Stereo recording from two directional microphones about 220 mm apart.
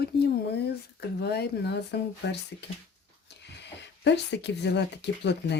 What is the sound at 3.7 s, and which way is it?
Speech, 50° left (ahead or behind).